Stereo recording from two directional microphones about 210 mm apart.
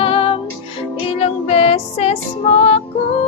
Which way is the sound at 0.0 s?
25° left (ahead or behind).